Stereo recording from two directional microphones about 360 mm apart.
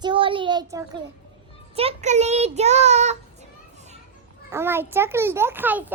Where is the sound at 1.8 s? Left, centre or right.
Centre.